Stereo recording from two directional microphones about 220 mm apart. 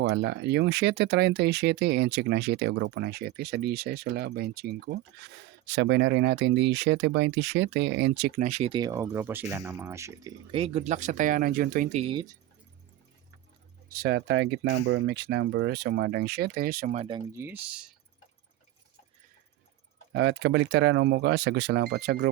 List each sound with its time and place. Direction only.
0.0 s speech: 50° right (ahead or behind)
8.4 s speech: 30° right (ahead or behind)
13.9 s speech: 45° right (ahead or behind); by 17.2 s 25° right (ahead or behind)
17.3 s speech: 10° right (ahead or behind)
20.1 s speech: 55° right (ahead or behind)